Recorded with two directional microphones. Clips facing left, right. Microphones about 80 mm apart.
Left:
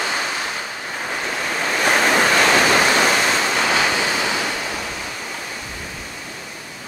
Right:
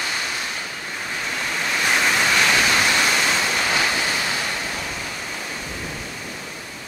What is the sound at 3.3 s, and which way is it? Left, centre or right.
Waves, left.